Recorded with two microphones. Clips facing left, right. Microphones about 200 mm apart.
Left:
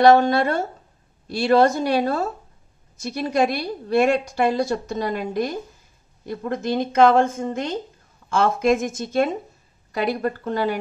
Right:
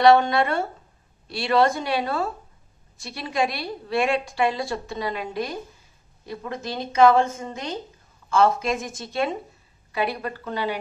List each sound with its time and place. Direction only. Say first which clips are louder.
0.0 s a woman's voice: left 2 dB; 40° left (ahead or behind)